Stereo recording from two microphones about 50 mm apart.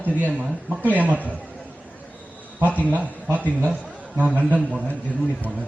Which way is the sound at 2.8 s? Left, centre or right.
Right.